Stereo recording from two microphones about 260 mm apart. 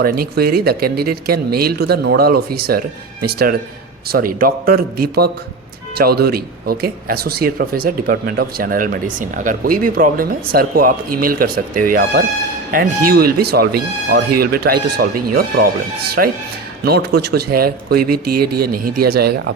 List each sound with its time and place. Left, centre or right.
0.0 s speech: right
18.1 s speech: right
18.5 s speech: right